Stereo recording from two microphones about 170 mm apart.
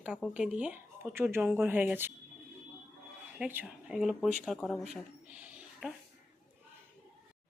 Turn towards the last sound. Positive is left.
turn(degrees=-5)  # may be behind; listen again after turning